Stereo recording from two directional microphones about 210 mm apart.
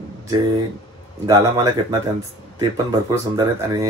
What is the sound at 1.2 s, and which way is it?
Speech, 15° right (ahead or behind).